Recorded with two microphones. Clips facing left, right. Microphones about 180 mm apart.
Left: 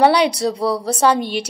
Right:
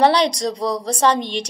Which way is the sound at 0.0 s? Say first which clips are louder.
Left 2 dB; 10° left (ahead or behind).